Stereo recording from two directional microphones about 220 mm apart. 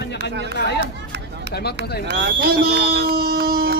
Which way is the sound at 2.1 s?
50° right (ahead or behind).